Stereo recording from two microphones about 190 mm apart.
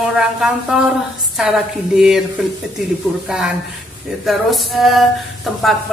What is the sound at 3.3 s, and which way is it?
Speech, 5° right (ahead or behind).